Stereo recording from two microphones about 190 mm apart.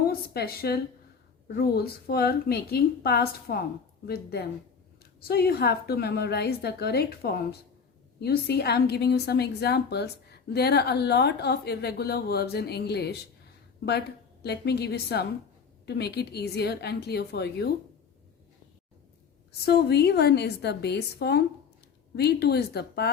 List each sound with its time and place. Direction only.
0.1 s a woman's voice: 55° left (ahead or behind)
14.4 s a woman's voice: 60° left (ahead or behind)
19.5 s a woman's voice: 60° left (ahead or behind)